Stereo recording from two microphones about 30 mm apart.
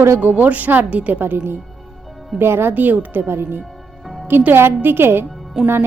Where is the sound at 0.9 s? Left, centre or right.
Right.